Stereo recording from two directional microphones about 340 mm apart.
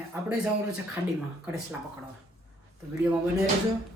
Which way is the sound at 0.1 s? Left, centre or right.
Centre.